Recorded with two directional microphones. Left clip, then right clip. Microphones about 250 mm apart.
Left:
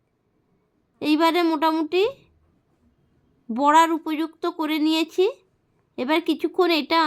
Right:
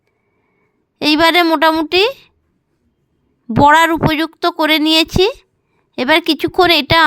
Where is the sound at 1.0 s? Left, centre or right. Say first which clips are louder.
Right 9 dB; right.